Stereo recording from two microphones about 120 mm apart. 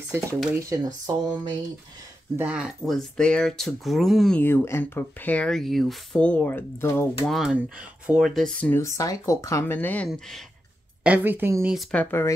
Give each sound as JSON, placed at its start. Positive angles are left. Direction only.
{"t": 0.6, "sound": "speech", "side_deg": -30}
{"t": 2.3, "sound": "speech", "side_deg": -10}
{"t": 4.4, "sound": "speech", "side_deg": 20}
{"t": 7.2, "sound": "speech", "side_deg": 0}
{"t": 8.6, "sound": "speech", "side_deg": 20}
{"t": 10.0, "sound": "speech", "side_deg": 5}
{"t": 11.1, "sound": "speech", "side_deg": -15}
{"t": 11.9, "sound": "speech", "side_deg": 15}